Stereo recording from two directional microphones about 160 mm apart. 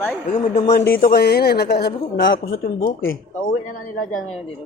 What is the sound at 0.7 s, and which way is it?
A man's voice, 65° left (ahead or behind).